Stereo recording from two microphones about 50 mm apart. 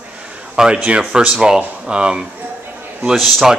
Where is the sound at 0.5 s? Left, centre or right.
Centre.